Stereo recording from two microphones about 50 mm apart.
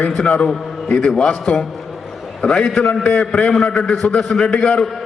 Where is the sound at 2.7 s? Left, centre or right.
Left.